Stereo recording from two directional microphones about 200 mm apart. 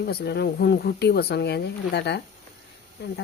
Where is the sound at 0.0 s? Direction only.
55° left (ahead or behind).